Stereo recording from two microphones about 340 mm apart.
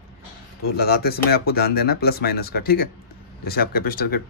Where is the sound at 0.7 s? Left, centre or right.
Left.